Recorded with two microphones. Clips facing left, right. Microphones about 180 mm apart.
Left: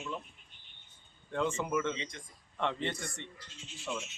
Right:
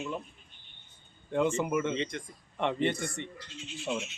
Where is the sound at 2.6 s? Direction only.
15° right (ahead or behind).